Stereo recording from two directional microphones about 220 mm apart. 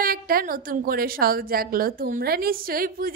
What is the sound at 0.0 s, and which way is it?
A woman's voice, 40° right (ahead or behind).